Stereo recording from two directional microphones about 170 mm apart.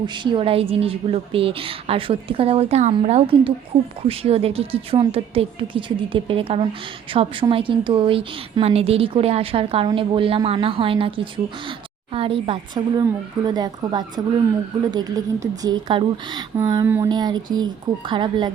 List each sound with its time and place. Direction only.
0.0 s a woman's voice: 25° right (ahead or behind)
12.1 s a woman's voice: 30° right (ahead or behind)
16.6 s a sound: 20° right (ahead or behind)
17.1 s a woman's voice: 25° right (ahead or behind)